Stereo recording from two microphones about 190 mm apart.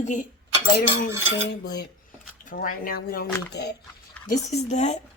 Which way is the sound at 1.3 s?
65° left (ahead or behind).